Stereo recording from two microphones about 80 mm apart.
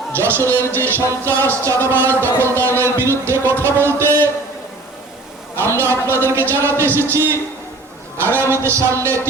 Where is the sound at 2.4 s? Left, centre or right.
Right.